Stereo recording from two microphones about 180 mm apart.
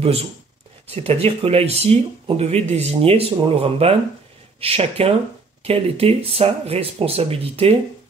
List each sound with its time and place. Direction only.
0.9 s speech: 35° right (ahead or behind)